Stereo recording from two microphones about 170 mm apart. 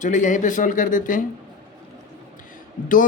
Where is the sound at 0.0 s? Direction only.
50° left (ahead or behind).